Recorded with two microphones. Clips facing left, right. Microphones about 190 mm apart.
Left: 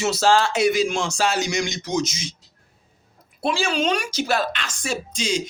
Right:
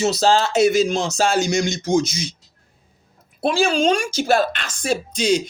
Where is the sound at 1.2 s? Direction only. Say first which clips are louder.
Right 5 dB; 50° right (ahead or behind).